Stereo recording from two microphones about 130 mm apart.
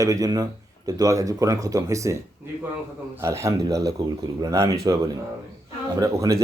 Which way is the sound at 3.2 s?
20° right (ahead or behind).